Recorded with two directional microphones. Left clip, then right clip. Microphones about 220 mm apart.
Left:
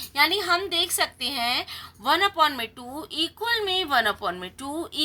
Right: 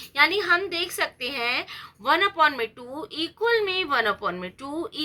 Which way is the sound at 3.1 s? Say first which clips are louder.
Right 2 dB; 55° left (ahead or behind).